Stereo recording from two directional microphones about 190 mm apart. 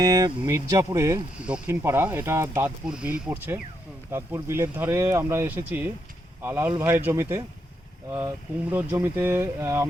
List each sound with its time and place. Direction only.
0.0 s speech: 20° right (ahead or behind)
1.4 s speech: 5° right (ahead or behind)
8.7 s speech: 10° right (ahead or behind)